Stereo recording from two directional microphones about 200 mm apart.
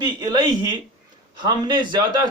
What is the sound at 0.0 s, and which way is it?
Speech, 20° right (ahead or behind).